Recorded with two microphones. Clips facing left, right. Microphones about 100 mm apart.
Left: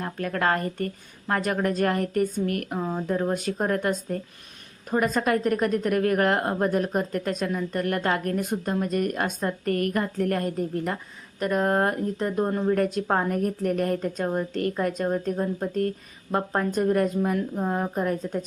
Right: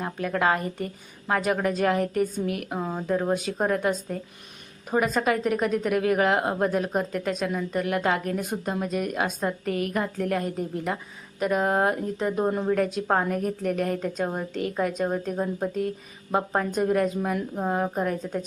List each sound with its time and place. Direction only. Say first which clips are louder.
0.0 s a woman's voice: right 1 dB; 5° right (ahead or behind)